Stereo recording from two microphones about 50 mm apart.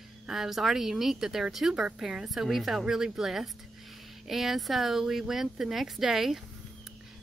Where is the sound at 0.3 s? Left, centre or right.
Centre.